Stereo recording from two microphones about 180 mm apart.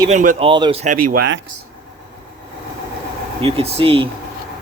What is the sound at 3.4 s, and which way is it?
Speech, 30° right (ahead or behind).